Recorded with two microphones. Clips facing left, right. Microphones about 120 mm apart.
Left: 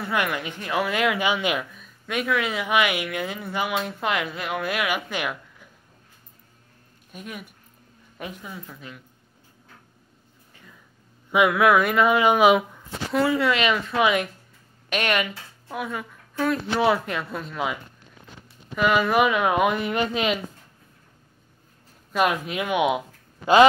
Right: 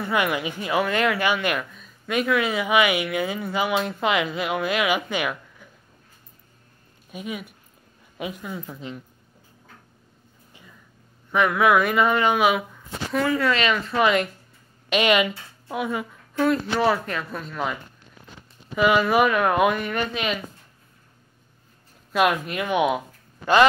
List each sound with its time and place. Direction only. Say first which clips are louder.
0.0 s speech: right 2 dB; 5° right (ahead or behind)
5.1 s a sound: right 2 dB; 5° left (ahead or behind)
7.1 s speech: right 5 dB; 5° right (ahead or behind)
8.5 s a woman's voice: right 6 dB; 25° right (ahead or behind)
11.3 s speech: left 2 dB; 10° left (ahead or behind)
11.6 s speech: right 1 dB; centre (ahead or behind)
15.0 s speech: right 5 dB; 10° right (ahead or behind); by 17.7 s 5° left (ahead or behind)
18.8 s speech: right 1 dB; 5° right (ahead or behind)
19.7 s speech: left 1 dB; 20° left (ahead or behind)
22.1 s speech: right 2 dB; centre (ahead or behind)